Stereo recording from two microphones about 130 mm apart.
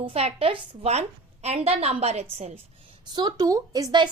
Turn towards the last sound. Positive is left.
turn(degrees=-30)  # may be behind; listen again after turning